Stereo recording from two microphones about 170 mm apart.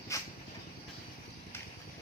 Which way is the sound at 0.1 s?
20° left (ahead or behind).